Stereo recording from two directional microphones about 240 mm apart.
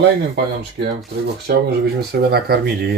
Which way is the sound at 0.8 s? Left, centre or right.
Right.